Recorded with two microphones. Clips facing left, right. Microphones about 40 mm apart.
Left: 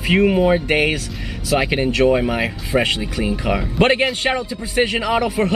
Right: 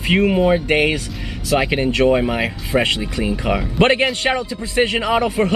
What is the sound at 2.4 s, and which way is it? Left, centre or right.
Speech, right.